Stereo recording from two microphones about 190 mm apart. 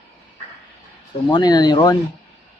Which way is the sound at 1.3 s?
20° left (ahead or behind).